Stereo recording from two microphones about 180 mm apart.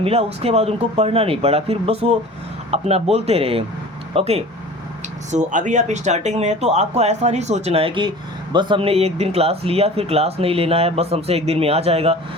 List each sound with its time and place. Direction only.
0.0 s speech: 35° right (ahead or behind)